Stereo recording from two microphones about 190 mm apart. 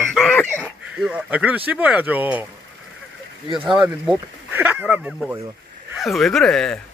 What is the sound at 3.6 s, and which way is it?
A man's voice, 10° right (ahead or behind).